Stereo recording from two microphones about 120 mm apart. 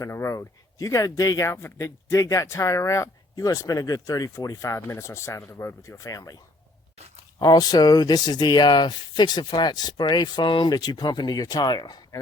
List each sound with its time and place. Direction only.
0.0 s speech: 25° left (ahead or behind)
7.3 s speech: 35° left (ahead or behind)